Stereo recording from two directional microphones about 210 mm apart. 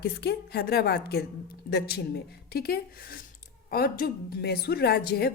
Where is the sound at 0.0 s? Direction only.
50° left (ahead or behind).